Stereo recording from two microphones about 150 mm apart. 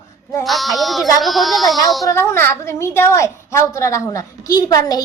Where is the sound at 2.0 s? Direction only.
20° left (ahead or behind).